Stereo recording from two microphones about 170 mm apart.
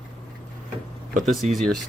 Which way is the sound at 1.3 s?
Centre (ahead or behind).